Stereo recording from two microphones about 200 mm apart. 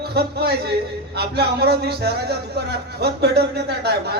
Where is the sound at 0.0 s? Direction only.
55° right (ahead or behind).